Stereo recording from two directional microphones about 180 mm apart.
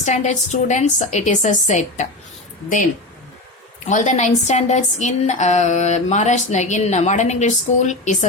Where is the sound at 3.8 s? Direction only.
40° left (ahead or behind).